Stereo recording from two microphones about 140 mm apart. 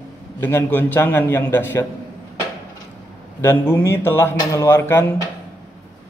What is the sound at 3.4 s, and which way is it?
Speech, 15° left (ahead or behind).